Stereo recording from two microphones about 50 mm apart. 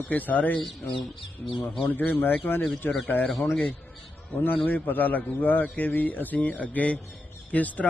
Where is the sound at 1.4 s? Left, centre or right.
Centre.